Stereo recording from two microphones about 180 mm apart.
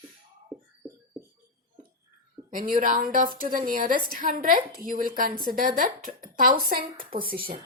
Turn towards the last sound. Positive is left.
turn(degrees=-55)  # may be behind; listen again after turning